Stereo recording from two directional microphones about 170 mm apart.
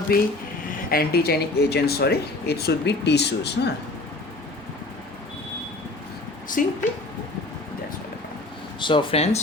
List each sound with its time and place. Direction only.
0.1 s speech: 60° left (ahead or behind); by 3.7 s 80° left
6.5 s speech: 50° left (ahead or behind)
8.8 s speech: 30° left (ahead or behind)